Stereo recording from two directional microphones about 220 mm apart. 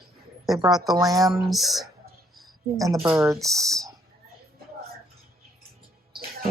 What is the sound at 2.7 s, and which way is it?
Speech, 15° right (ahead or behind).